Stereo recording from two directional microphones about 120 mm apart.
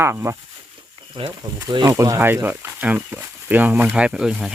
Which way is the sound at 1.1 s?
45° right (ahead or behind).